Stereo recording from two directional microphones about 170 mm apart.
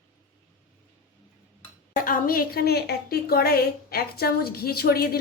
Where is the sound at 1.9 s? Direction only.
55° left (ahead or behind).